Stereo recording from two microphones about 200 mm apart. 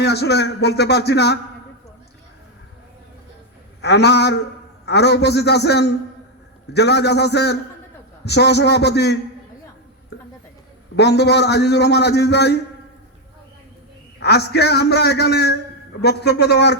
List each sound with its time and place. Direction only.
0.0 s a man's voice: 55° left (ahead or behind)
3.8 s a man's voice: 55° left (ahead or behind)
10.9 s a man's voice: 60° left (ahead or behind)
14.2 s a man's voice: 55° left (ahead or behind)